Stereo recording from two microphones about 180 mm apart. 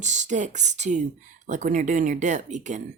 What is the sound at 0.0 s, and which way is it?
Speech, 40° right (ahead or behind).